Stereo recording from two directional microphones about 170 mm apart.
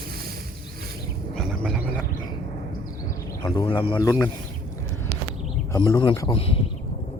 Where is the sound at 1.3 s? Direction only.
Centre (ahead or behind).